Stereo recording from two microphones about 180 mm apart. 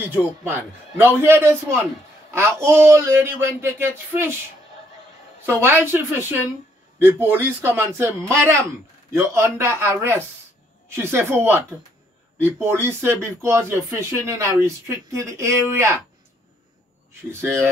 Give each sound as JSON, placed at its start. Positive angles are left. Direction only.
{"t": 0.1, "sound": "speech", "side_deg": -10}
{"t": 5.4, "sound": "speech", "side_deg": -15}
{"t": 12.6, "sound": "speech", "side_deg": -15}
{"t": 17.3, "sound": "speech", "side_deg": -15}